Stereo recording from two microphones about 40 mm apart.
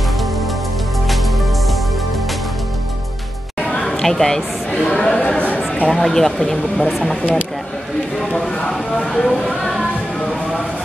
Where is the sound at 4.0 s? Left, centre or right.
Centre.